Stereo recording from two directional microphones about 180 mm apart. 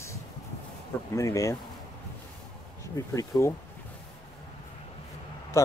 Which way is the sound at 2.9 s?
20° left (ahead or behind).